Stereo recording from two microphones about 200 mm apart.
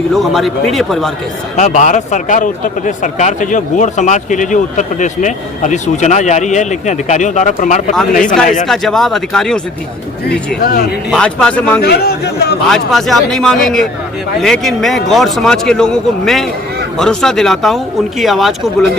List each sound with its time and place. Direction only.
0.1 s a man's voice: centre (ahead or behind)
1.5 s a man's voice: 35° left (ahead or behind)
8.6 s a man's voice: centre (ahead or behind)
10.6 s speech: 50° left (ahead or behind)
11.1 s a man's voice: 5° left (ahead or behind)
11.8 s speech: 50° left (ahead or behind)
12.6 s a man's voice: centre (ahead or behind)